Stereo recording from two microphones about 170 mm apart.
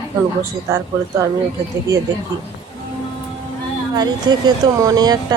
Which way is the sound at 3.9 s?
25° right (ahead or behind).